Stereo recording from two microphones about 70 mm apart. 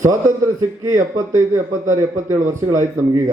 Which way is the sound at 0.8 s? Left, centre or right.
Right.